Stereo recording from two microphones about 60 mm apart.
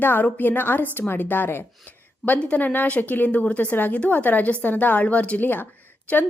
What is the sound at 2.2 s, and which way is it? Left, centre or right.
A woman's voice, left.